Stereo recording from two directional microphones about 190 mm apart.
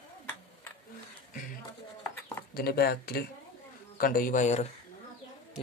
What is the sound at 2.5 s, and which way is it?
A man's voice, 55° left (ahead or behind).